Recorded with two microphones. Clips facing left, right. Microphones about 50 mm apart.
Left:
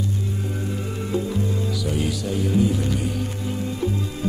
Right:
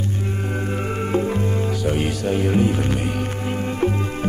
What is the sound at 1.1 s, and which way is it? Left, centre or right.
Music, right.